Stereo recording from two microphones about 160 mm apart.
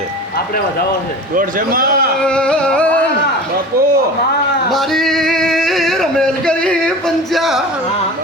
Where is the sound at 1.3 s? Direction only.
60° right (ahead or behind).